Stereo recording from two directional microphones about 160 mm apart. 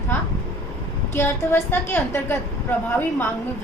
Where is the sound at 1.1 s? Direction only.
15° left (ahead or behind).